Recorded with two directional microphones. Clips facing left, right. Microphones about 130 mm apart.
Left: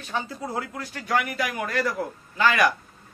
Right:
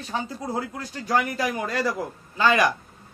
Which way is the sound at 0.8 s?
35° right (ahead or behind).